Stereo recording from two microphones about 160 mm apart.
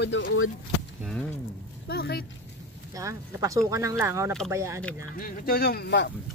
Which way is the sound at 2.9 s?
20° right (ahead or behind).